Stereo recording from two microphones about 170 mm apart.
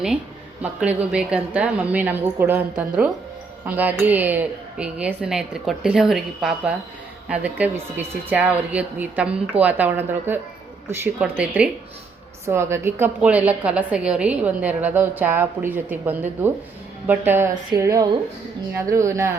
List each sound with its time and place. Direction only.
0.6 s a woman's voice: 5° right (ahead or behind)